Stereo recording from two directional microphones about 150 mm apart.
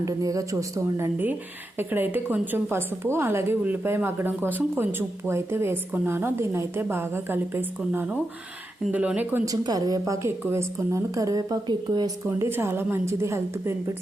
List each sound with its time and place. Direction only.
0.0 s a woman's voice: 20° right (ahead or behind)
9.5 s a woman's voice: 25° right (ahead or behind)